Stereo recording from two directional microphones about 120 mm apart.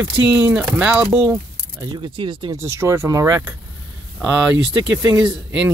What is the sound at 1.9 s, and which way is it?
Speech, 45° right (ahead or behind).